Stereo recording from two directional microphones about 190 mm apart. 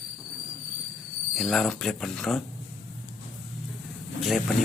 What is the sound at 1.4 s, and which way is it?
Speech, centre (ahead or behind).